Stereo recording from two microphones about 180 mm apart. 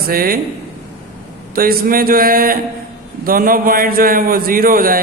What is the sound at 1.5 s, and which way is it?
A man's voice, 55° right (ahead or behind).